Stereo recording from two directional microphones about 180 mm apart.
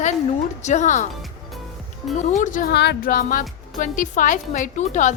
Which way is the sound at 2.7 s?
60° left (ahead or behind).